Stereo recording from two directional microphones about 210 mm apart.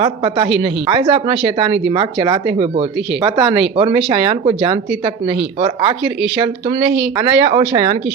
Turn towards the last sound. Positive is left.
turn(degrees=-25)  # may be behind; listen again after turning